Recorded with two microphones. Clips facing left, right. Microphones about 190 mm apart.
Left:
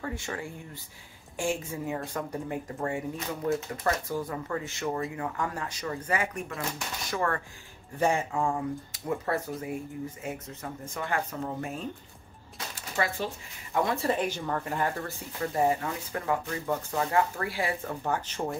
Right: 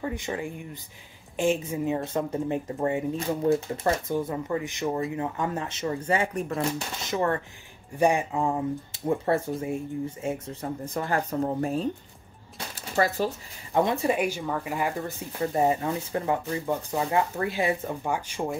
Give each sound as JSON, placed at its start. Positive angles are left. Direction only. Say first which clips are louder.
{"t": 0.0, "sound": "speech", "louder": "right 4 dB", "side_deg": -20}
{"t": 12.5, "sound": "bird", "louder": "right 5 dB", "side_deg": -40}
{"t": 13.7, "sound": "speech", "louder": "right 4 dB", "side_deg": -20}